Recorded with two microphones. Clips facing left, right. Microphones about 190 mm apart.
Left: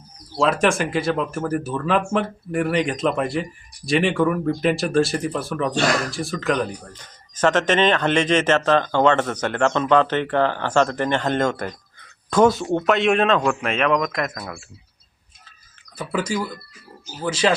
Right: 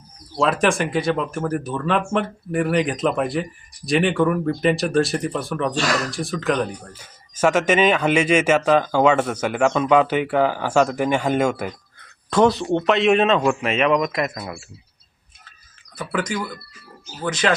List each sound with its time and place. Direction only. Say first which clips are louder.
0.3 s speech: even; centre (ahead or behind)
16.0 s speech: left 1 dB; 10° left (ahead or behind)